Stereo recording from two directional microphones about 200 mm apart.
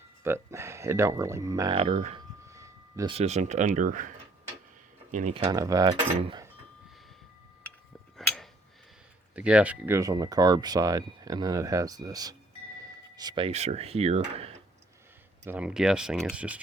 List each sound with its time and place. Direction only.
0.3 s speech: 15° right (ahead or behind)
1.7 s cutlery: 30° right (ahead or behind)
2.5 s a sound: 15° right (ahead or behind)
3.2 s cutlery: 35° right (ahead or behind)
5.1 s cutlery: 30° right (ahead or behind)
8.1 s tick-tock: centre (ahead or behind)
9.3 s speech: 5° right (ahead or behind)
13.1 s cutlery: 20° right (ahead or behind)
15.4 s speech: 5° right (ahead or behind)